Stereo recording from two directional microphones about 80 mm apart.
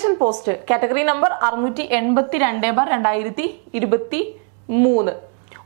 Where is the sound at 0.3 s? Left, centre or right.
Centre.